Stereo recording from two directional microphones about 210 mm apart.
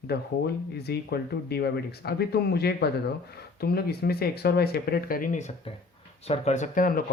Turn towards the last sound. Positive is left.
turn(degrees=40)  # may be behind; listen again after turning